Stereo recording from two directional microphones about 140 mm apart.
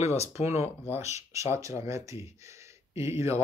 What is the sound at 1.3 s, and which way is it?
Speech, 20° right (ahead or behind).